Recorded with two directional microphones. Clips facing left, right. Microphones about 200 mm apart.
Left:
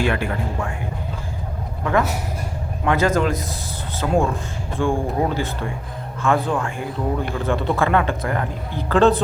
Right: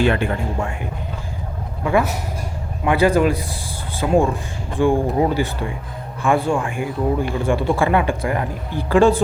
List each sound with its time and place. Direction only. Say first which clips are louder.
0.1 s speech: right 3 dB; 30° right (ahead or behind)
1.8 s speech: right 2 dB; 10° right (ahead or behind)